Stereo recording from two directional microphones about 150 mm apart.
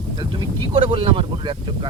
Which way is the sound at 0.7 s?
35° right (ahead or behind).